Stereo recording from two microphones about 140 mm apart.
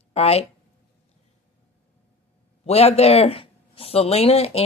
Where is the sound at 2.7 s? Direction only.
45° left (ahead or behind).